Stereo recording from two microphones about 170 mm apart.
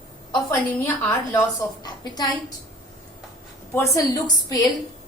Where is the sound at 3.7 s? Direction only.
20° left (ahead or behind).